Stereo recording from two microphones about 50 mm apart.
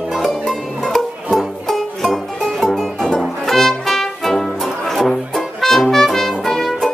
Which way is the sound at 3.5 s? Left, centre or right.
Centre.